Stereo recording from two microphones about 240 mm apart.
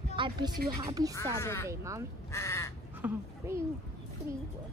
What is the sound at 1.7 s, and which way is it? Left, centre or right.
Speech, centre.